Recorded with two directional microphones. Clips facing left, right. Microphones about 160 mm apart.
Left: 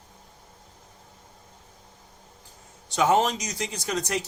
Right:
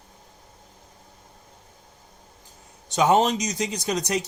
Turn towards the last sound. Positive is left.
turn(degrees=-20)  # may be behind; listen again after turning